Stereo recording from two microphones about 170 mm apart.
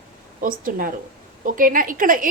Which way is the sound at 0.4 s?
50° right (ahead or behind).